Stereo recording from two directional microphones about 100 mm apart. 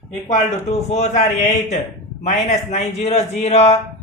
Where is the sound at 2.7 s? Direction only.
90° left.